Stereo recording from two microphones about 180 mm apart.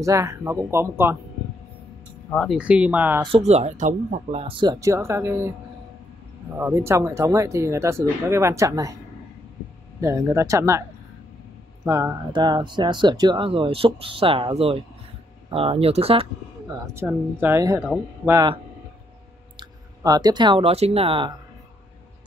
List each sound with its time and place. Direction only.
0.0 s speech: 15° right (ahead or behind)
2.3 s speech: centre (ahead or behind)
3.2 s speech: 30° right (ahead or behind); by 5.5 s 15° right (ahead or behind)
6.5 s speech: 15° right (ahead or behind)
9.9 s speech: 15° right (ahead or behind)
15.5 s speech: 30° right (ahead or behind)
16.6 s speech: 15° right (ahead or behind)
20.0 s speech: 20° right (ahead or behind)